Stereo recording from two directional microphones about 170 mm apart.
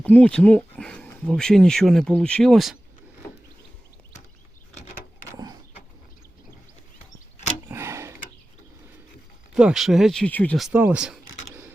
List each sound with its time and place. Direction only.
0.0 s speech: 5° left (ahead or behind)
7.7 s a sound: 15° right (ahead or behind)
9.6 s speech: 5° right (ahead or behind)
10.7 s speech: 10° right (ahead or behind)